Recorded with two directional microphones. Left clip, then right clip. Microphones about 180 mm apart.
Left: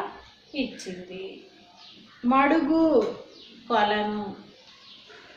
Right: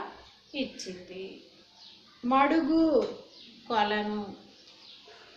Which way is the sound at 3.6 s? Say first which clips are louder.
Left 5 dB; 20° right (ahead or behind).